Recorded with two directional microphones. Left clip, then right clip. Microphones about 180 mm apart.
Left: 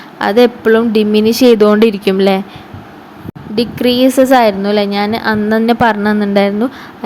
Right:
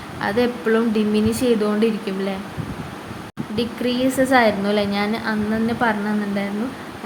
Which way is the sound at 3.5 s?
35° left (ahead or behind).